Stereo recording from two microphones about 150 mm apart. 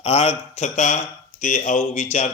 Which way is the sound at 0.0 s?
40° left (ahead or behind).